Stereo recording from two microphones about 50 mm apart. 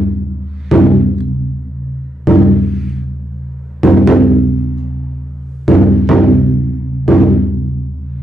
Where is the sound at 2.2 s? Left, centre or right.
Centre.